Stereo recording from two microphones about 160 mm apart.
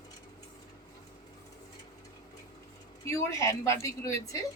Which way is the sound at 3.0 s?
20° left (ahead or behind).